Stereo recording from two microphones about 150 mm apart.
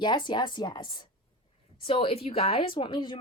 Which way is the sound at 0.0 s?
30° left (ahead or behind).